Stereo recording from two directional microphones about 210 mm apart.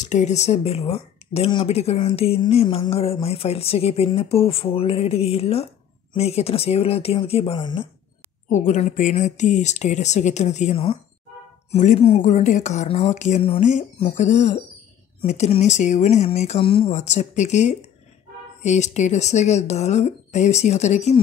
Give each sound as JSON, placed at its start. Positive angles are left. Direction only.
{"t": 0.0, "sound": "speech", "side_deg": 35}
{"t": 8.5, "sound": "speech", "side_deg": 35}